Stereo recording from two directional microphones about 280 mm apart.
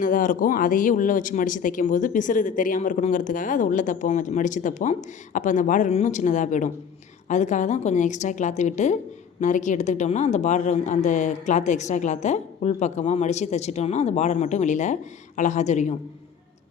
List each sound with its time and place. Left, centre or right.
0.0 s speech: left